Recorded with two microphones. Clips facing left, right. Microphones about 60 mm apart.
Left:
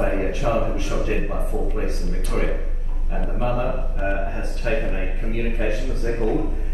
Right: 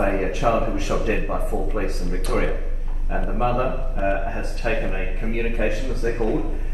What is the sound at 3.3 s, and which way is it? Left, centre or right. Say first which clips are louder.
Speech: right 2 dB; right.